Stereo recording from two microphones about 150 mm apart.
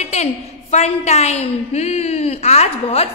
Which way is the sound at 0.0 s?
45° left (ahead or behind).